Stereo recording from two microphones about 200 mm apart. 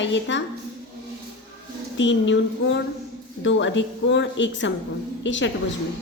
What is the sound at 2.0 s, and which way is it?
A woman's voice, 65° left (ahead or behind).